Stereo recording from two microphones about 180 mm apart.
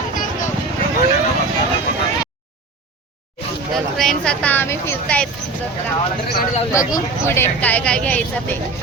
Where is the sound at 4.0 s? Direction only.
5° left (ahead or behind).